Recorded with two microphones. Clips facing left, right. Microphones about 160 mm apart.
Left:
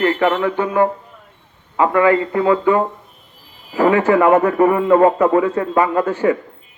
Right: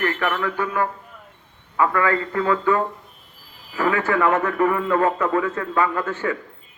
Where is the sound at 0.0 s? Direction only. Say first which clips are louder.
Left 7 dB; 25° left (ahead or behind).